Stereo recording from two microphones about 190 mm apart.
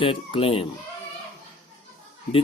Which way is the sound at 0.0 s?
30° left (ahead or behind).